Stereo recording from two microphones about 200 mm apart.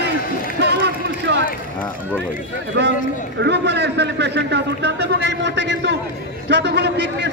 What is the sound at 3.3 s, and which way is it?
A man's voice, 60° right (ahead or behind).